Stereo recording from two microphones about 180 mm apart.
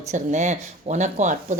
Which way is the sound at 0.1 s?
40° right (ahead or behind).